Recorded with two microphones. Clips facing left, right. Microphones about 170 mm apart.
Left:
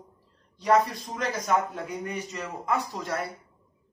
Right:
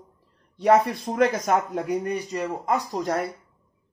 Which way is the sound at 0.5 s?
60° right (ahead or behind).